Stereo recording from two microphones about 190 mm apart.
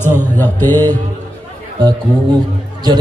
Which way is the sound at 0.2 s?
10° left (ahead or behind).